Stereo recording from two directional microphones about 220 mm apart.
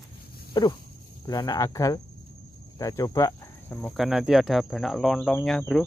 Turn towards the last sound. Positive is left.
turn(degrees=0)  # may be behind; listen again after turning